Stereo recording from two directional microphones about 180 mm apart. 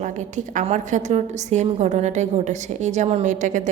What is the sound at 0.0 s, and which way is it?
A woman's voice, 45° right (ahead or behind).